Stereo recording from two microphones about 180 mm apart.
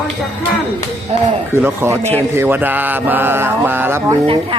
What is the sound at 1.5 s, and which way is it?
Mantra, 15° right (ahead or behind).